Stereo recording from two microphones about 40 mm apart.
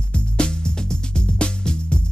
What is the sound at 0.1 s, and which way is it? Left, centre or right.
Music, left.